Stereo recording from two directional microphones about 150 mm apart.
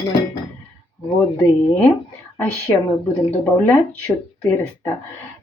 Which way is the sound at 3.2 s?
15° left (ahead or behind).